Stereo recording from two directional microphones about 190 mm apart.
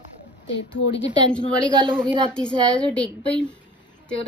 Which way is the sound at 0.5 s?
65° left (ahead or behind).